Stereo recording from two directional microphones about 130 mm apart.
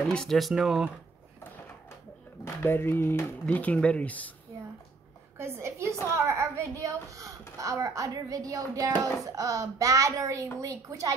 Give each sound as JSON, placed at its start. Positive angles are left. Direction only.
{"t": 0.0, "sound": "speech", "side_deg": 5}
{"t": 2.4, "sound": "speech", "side_deg": 15}
{"t": 5.4, "sound": "speech", "side_deg": -20}